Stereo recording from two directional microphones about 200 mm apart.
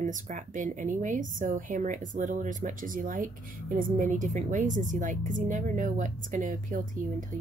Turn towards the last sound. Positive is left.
turn(degrees=-40)  # may be behind; listen again after turning